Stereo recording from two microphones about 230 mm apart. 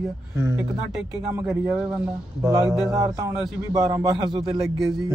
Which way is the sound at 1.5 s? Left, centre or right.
Centre.